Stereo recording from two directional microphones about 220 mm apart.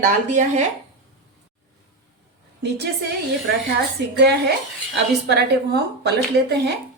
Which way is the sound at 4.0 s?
50° right (ahead or behind).